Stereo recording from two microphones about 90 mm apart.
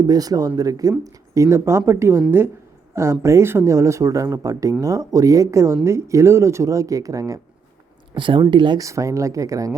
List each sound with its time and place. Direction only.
0.0 s a woman's voice: 45° right (ahead or behind)
8.1 s speech: 65° right (ahead or behind)
8.8 s speech: 35° right (ahead or behind)